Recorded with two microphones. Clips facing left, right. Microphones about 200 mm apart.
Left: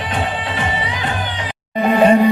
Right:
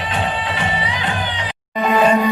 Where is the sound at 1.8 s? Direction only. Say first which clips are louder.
Left 3 dB; 55° left (ahead or behind).